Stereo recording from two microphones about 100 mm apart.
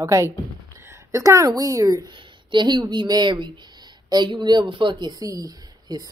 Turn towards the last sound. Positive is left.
turn(degrees=-40)  # may be behind; listen again after turning